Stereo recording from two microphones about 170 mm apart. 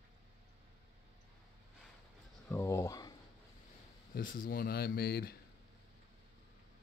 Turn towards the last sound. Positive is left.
turn(degrees=65)  # may be behind; listen again after turning